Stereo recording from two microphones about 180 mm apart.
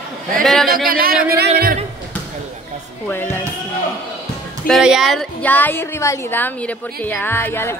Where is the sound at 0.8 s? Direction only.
55° right (ahead or behind).